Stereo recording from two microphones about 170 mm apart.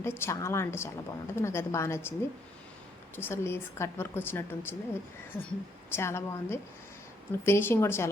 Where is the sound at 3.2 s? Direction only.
15° left (ahead or behind).